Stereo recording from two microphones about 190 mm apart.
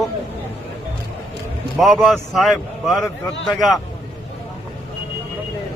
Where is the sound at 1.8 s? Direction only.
Centre (ahead or behind).